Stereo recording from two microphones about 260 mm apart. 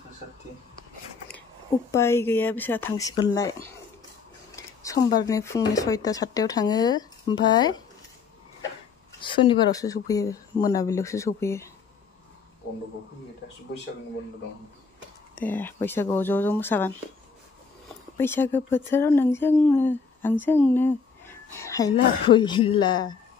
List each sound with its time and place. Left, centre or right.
1.9 s speech: centre
4.6 s speech: centre
9.4 s speech: centre
15.3 s speech: centre
18.1 s speech: centre